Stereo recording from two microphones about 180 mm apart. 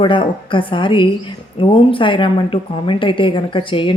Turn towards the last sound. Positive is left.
turn(degrees=30)  # may be behind; listen again after turning